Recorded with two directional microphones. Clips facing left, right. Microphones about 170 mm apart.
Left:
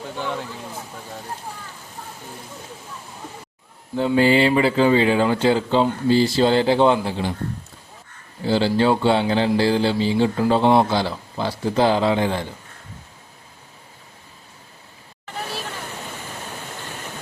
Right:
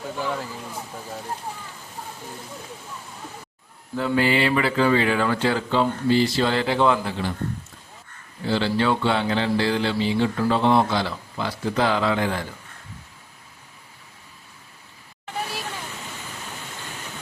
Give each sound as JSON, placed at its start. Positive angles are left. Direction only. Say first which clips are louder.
{"t": 0.2, "sound": "a sound", "louder": "left 1 dB", "side_deg": -5}
{"t": 3.9, "sound": "speech", "louder": "left 4 dB", "side_deg": 30}
{"t": 8.4, "sound": "speech", "louder": "left 4 dB", "side_deg": 35}